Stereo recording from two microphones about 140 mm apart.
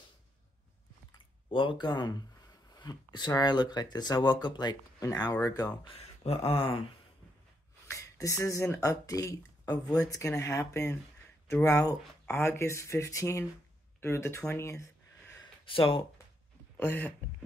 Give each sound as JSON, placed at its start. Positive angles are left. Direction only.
{"t": 1.1, "sound": "speech", "side_deg": 35}
{"t": 5.9, "sound": "mantra", "side_deg": 45}
{"t": 7.9, "sound": "a sound", "side_deg": 20}
{"t": 8.8, "sound": "speech", "side_deg": 25}
{"t": 15.4, "sound": "a sound", "side_deg": 40}
{"t": 16.7, "sound": "speech", "side_deg": 15}